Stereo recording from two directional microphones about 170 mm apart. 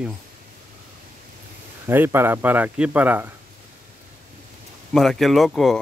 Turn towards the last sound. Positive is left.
turn(degrees=0)  # may be behind; listen again after turning